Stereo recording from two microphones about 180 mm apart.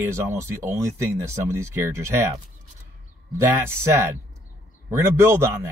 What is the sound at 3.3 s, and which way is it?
Speech, 15° right (ahead or behind).